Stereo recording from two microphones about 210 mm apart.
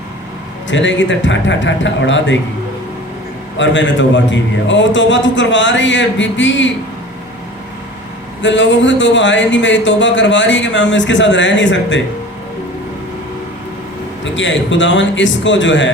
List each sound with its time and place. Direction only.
0.7 s speech: 60° left (ahead or behind)
3.6 s speech: 60° left (ahead or behind)
8.4 s speech: 60° left (ahead or behind)
14.3 s speech: 60° left (ahead or behind)